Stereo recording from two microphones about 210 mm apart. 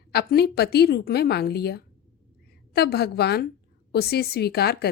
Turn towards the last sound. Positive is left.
turn(degrees=50)  # may be behind; listen again after turning